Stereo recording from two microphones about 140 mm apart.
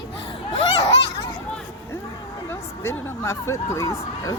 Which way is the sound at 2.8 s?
20° left (ahead or behind).